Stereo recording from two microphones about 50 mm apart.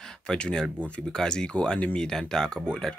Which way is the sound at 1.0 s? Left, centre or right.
Centre.